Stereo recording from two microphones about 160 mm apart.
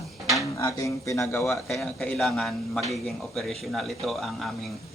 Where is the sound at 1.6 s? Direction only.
Centre (ahead or behind).